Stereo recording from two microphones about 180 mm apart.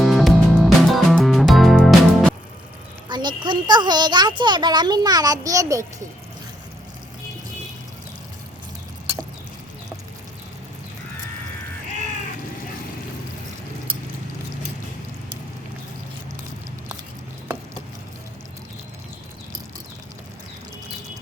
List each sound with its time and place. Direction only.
0.0 s music: centre (ahead or behind)
3.1 s speech: 25° right (ahead or behind)